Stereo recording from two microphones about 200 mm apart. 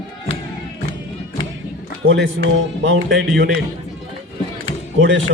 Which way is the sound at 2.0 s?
70° right (ahead or behind).